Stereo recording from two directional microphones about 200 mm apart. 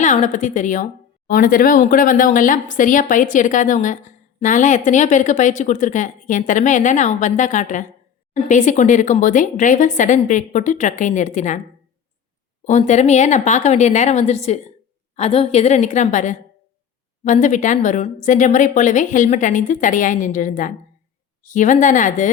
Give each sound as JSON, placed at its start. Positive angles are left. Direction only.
{"t": 0.0, "sound": "speech", "side_deg": 35}
{"t": 12.6, "sound": "speech", "side_deg": 35}